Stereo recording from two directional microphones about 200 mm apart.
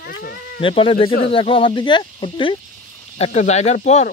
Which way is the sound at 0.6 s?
25° left (ahead or behind).